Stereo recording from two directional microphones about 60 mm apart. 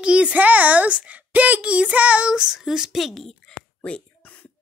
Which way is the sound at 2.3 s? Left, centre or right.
Centre.